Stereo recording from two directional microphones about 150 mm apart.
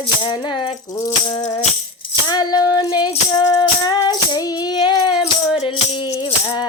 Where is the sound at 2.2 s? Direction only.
25° left (ahead or behind).